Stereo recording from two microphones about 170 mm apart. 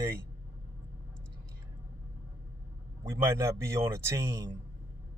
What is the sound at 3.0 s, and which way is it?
A man's voice, 15° right (ahead or behind).